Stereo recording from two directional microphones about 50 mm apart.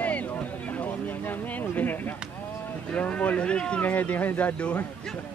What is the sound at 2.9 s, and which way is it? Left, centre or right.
Speech, left.